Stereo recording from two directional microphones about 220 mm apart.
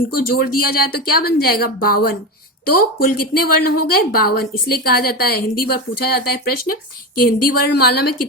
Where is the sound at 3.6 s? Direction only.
90° left.